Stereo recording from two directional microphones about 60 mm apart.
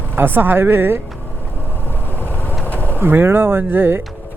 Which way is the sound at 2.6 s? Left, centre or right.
Left.